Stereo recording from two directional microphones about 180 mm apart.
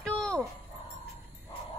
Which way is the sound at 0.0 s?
5° left (ahead or behind).